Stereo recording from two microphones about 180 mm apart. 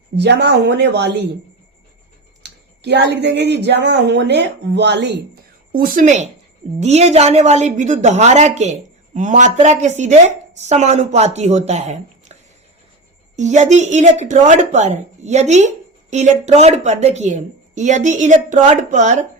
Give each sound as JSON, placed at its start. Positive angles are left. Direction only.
{"t": 0.2, "sound": "speech", "side_deg": -70}
{"t": 2.4, "sound": "speech", "side_deg": -70}
{"t": 5.7, "sound": "a woman's voice", "side_deg": -50}